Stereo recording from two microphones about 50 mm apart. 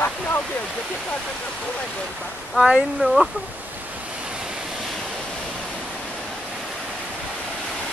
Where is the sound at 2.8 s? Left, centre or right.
Centre.